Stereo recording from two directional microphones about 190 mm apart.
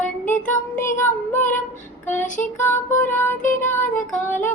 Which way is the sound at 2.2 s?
40° left (ahead or behind).